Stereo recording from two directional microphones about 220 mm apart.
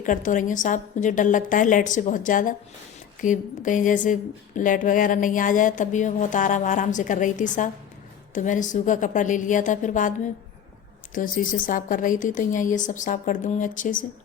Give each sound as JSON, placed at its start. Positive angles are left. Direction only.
{"t": 0.0, "sound": "a woman's voice", "side_deg": 35}